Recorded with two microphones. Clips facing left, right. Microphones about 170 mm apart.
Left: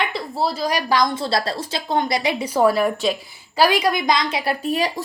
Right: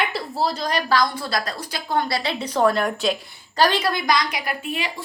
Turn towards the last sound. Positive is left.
turn(degrees=40)  # may be behind; listen again after turning